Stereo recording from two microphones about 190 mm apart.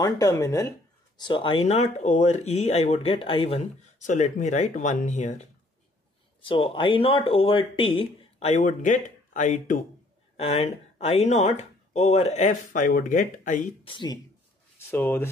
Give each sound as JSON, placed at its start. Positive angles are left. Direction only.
{"t": 0.0, "sound": "speech", "side_deg": 20}
{"t": 6.4, "sound": "speech", "side_deg": 25}
{"t": 10.3, "sound": "speech", "side_deg": 30}
{"t": 13.8, "sound": "speech", "side_deg": 25}
{"t": 14.9, "sound": "speech", "side_deg": 10}